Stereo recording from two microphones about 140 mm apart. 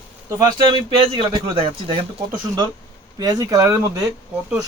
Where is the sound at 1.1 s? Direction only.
40° right (ahead or behind).